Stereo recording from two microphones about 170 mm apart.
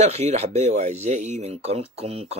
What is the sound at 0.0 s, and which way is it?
Speech, 40° right (ahead or behind).